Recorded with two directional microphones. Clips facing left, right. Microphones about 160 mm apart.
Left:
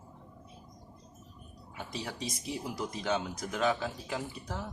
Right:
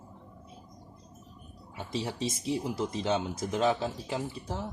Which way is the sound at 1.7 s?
25° right (ahead or behind).